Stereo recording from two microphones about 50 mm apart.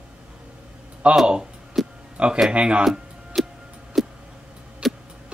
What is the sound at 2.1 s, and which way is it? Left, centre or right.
Speech, right.